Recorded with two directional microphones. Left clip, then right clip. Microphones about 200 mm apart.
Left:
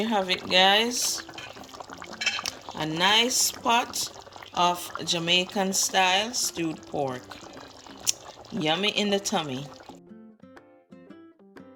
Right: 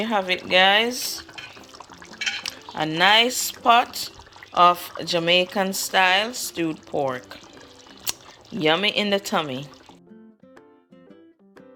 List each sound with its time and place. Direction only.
0.0 s speech: 5° left (ahead or behind)
2.7 s speech: centre (ahead or behind)
8.5 s speech: centre (ahead or behind)